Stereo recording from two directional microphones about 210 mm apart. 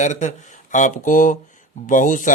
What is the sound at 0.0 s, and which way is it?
Speech, 35° left (ahead or behind).